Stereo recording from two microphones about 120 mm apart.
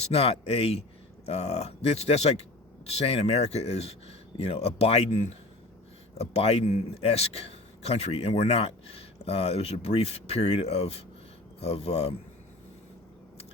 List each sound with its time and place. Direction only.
0.0 s speech: 55° left (ahead or behind)